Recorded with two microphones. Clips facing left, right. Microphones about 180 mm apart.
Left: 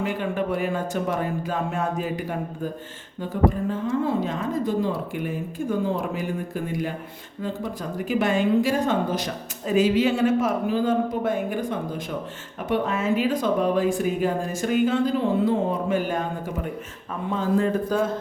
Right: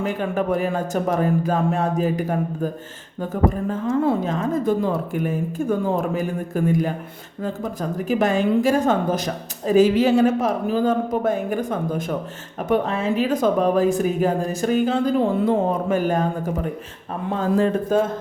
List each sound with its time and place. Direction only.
0.0 s speech: 45° right (ahead or behind)
3.7 s speech: 45° right (ahead or behind)